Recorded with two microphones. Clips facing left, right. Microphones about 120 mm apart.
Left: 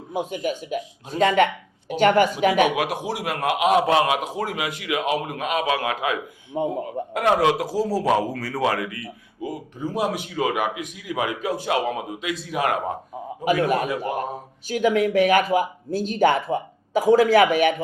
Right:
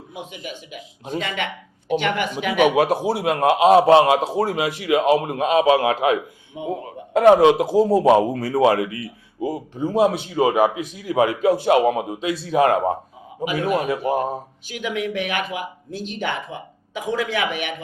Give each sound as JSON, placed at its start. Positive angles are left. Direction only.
{"t": 0.1, "sound": "a man's voice", "side_deg": 45}
{"t": 2.6, "sound": "a man's voice", "side_deg": -35}
{"t": 6.5, "sound": "a man's voice", "side_deg": 50}
{"t": 7.1, "sound": "a man's voice", "side_deg": -25}
{"t": 13.4, "sound": "a man's voice", "side_deg": 45}
{"t": 13.7, "sound": "a man's voice", "side_deg": -30}
{"t": 14.7, "sound": "speech", "side_deg": 40}